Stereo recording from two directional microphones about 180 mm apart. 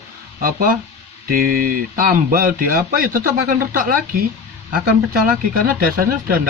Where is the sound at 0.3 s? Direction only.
50° right (ahead or behind).